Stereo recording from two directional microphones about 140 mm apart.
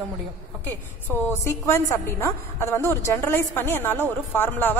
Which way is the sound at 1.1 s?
15° left (ahead or behind).